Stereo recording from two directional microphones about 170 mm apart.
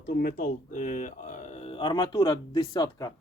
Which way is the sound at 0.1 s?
60° left (ahead or behind).